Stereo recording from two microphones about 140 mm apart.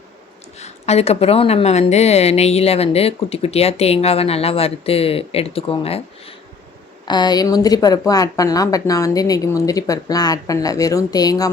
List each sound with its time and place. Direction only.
0.6 s a woman's voice: 50° left (ahead or behind)
7.0 s speech: 30° left (ahead or behind)